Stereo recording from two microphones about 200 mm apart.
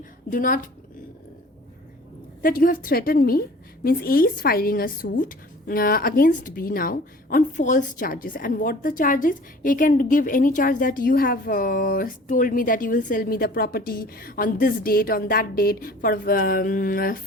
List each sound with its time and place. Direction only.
0.3 s a woman's voice: 40° left (ahead or behind)
2.4 s a woman's voice: 45° left (ahead or behind)